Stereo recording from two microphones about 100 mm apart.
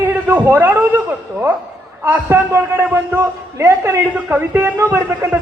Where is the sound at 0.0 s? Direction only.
20° right (ahead or behind).